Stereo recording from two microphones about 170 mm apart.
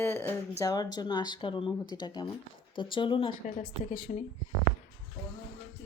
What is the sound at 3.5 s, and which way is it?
Speech, 45° left (ahead or behind).